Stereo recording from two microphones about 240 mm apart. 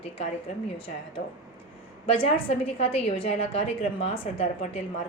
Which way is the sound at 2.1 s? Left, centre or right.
Left.